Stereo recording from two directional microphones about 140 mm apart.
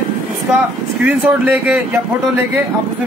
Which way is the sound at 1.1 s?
10° right (ahead or behind).